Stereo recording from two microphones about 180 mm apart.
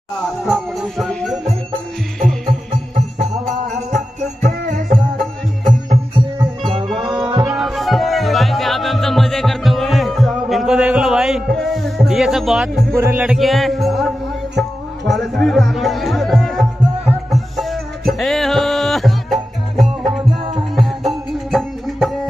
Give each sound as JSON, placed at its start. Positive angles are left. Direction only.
{"t": 0.5, "sound": "speech", "side_deg": 0}
{"t": 1.4, "sound": "music", "side_deg": -35}
{"t": 4.4, "sound": "music", "side_deg": -45}
{"t": 6.1, "sound": "music", "side_deg": -30}
{"t": 7.4, "sound": "music", "side_deg": 0}
{"t": 12.9, "sound": "music", "side_deg": -10}